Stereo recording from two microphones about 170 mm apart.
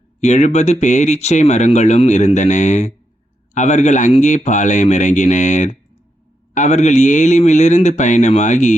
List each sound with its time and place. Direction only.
0.2 s speech: 45° left (ahead or behind)